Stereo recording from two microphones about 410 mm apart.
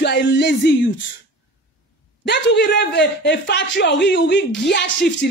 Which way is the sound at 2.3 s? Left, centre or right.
Left.